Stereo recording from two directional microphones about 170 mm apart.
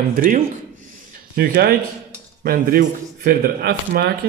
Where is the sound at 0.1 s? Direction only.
55° right (ahead or behind).